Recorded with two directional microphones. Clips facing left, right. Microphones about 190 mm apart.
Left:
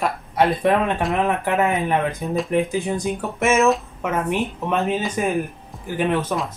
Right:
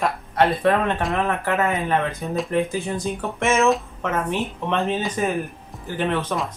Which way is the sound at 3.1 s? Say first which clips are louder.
Left 1 dB; 5° left (ahead or behind).